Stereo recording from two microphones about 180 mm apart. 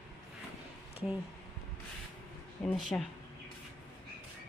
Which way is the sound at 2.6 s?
5° left (ahead or behind).